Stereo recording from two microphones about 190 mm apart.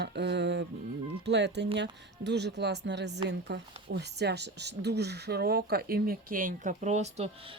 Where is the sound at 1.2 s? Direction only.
65° right (ahead or behind).